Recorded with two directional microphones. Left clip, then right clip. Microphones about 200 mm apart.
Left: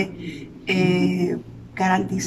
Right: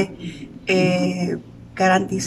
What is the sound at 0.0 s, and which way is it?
A woman's voice, centre (ahead or behind).